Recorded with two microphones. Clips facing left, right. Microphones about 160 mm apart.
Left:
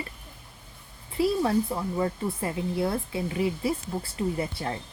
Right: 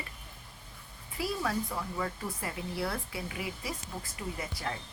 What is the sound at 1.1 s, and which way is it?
Speech, 25° left (ahead or behind).